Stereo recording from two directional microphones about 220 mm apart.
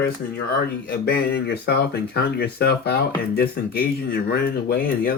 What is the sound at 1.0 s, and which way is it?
Speech, 50° left (ahead or behind).